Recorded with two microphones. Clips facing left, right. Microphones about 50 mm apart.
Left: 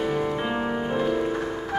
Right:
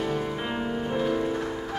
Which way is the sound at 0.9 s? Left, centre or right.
Centre.